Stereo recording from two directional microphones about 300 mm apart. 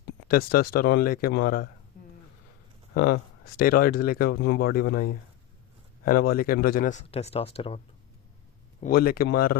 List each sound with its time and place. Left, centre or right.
0.3 s speech: left
2.9 s speech: left
8.8 s speech: left